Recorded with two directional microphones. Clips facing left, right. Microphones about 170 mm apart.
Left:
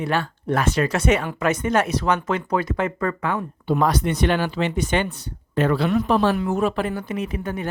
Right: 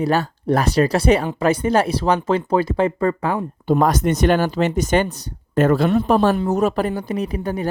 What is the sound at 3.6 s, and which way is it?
Speech, 45° right (ahead or behind).